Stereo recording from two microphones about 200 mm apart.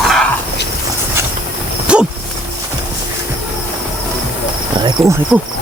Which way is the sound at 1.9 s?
5° right (ahead or behind).